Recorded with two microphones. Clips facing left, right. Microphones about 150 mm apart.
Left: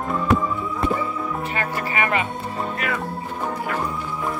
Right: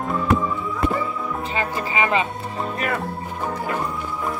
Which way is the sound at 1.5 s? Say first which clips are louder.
Right 1 dB; 20° right (ahead or behind).